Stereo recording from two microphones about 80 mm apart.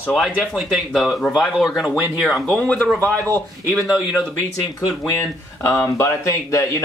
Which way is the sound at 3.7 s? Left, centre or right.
Centre.